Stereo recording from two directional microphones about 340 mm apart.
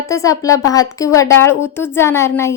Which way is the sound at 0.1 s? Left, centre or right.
Centre.